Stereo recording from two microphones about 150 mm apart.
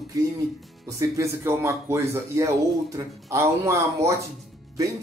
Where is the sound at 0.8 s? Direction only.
20° right (ahead or behind).